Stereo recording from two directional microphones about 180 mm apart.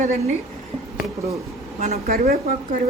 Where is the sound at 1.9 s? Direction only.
55° right (ahead or behind).